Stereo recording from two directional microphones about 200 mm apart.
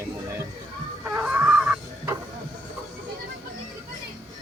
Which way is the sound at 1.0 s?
10° right (ahead or behind).